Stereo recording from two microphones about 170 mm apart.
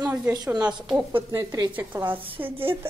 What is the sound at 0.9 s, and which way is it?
A woman's voice, 10° right (ahead or behind).